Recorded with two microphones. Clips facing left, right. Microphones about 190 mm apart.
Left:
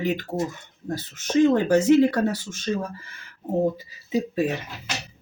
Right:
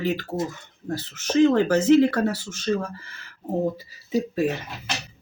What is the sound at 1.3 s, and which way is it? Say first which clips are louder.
Speech: even; 15° left (ahead or behind).